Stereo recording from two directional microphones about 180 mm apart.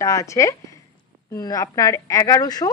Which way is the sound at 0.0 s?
15° left (ahead or behind).